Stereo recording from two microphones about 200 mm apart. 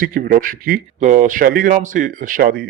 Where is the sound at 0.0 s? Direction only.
45° right (ahead or behind).